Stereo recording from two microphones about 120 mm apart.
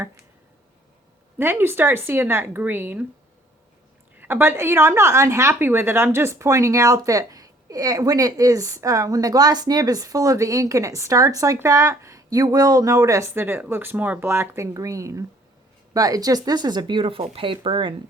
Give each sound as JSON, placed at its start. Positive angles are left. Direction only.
{"t": 1.4, "sound": "a woman's voice", "side_deg": -20}
{"t": 4.2, "sound": "a woman's voice", "side_deg": -15}